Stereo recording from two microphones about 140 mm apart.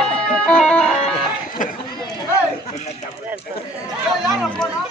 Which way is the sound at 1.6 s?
70° left (ahead or behind).